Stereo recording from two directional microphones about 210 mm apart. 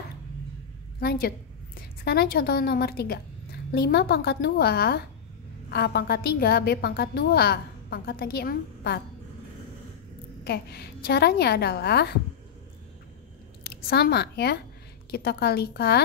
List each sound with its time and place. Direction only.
0.9 s a woman's voice: 45° left (ahead or behind)
10.4 s a woman's voice: 50° left (ahead or behind)
13.7 s a woman's voice: 50° left (ahead or behind)